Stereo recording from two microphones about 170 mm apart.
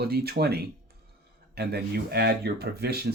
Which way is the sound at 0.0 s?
65° right (ahead or behind).